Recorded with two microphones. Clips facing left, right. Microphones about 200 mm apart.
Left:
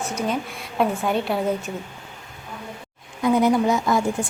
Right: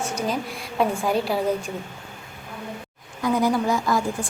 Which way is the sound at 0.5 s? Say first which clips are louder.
Left 1 dB; centre (ahead or behind).